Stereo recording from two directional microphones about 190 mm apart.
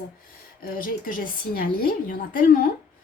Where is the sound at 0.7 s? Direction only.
50° left (ahead or behind).